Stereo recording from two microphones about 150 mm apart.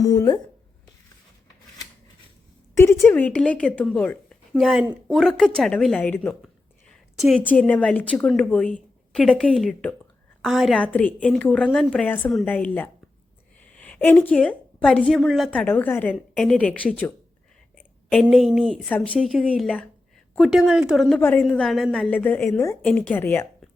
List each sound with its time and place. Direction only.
0.0 s a woman's voice: 20° left (ahead or behind)
2.7 s a woman's voice: 15° left (ahead or behind)
10.4 s a woman's voice: centre (ahead or behind)
15.5 s a woman's voice: 10° left (ahead or behind)
21.2 s a woman's voice: 15° left (ahead or behind)
21.4 s a woman's voice: centre (ahead or behind)
22.1 s a woman's voice: 10° left (ahead or behind)